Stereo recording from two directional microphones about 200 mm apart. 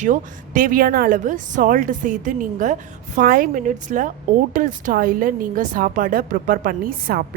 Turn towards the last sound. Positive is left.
turn(degrees=-45)  # may be behind; listen again after turning